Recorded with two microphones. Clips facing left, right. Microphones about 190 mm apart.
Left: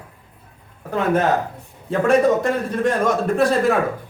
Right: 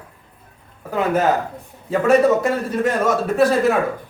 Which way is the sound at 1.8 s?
5° right (ahead or behind).